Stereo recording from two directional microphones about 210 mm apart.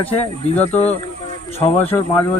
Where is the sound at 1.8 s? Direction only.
10° left (ahead or behind).